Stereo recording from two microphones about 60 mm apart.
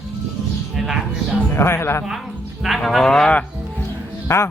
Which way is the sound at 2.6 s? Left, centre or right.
Centre.